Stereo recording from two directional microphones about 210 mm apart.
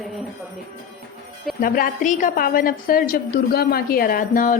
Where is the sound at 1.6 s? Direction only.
45° left (ahead or behind).